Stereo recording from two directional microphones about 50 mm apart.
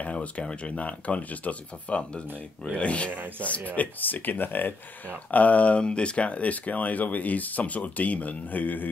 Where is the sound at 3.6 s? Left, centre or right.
Left.